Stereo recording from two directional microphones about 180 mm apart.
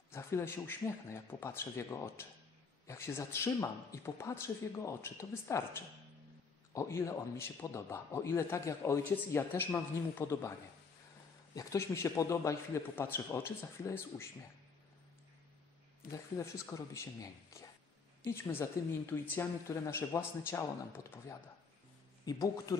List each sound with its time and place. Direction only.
0.1 s a man's voice: 15° left (ahead or behind)
11.5 s a man's voice: 15° left (ahead or behind)
16.1 s a man's voice: 15° left (ahead or behind)